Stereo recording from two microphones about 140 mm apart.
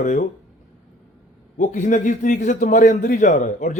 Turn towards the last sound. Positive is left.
turn(degrees=60)  # may be behind; listen again after turning